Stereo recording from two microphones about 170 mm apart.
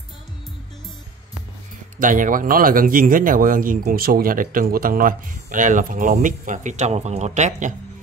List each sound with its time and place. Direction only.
2.0 s speech: 50° right (ahead or behind)